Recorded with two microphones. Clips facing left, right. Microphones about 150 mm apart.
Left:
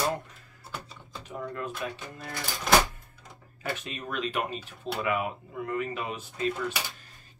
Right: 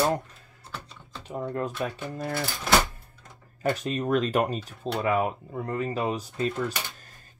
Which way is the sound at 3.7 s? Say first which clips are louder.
Right 9 dB; 40° right (ahead or behind).